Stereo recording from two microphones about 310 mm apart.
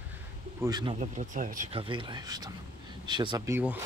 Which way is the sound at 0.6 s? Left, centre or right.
Centre.